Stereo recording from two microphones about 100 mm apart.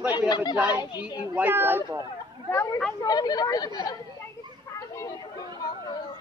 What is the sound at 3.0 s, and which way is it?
Speech, 40° left (ahead or behind).